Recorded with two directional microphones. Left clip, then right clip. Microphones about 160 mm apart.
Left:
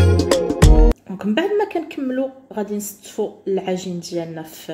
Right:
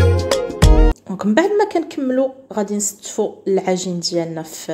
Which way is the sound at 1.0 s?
30° right (ahead or behind).